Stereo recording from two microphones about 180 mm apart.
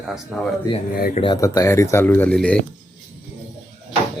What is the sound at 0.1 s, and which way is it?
Speech, 5° right (ahead or behind).